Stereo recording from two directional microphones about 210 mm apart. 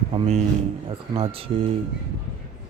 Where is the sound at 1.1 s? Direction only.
25° right (ahead or behind).